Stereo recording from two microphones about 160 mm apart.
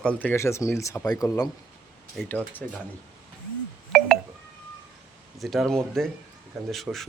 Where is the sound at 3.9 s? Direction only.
Centre (ahead or behind).